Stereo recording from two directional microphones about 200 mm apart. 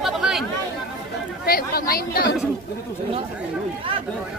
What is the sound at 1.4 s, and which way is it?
Speech, 50° left (ahead or behind).